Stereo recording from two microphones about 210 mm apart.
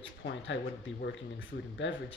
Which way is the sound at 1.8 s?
60° left (ahead or behind).